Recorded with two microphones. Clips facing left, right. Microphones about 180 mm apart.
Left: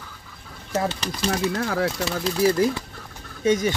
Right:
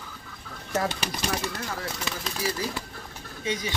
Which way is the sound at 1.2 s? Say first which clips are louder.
Left 9 dB; 65° left (ahead or behind).